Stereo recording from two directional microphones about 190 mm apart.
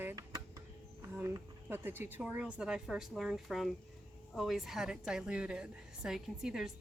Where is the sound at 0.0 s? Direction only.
15° right (ahead or behind).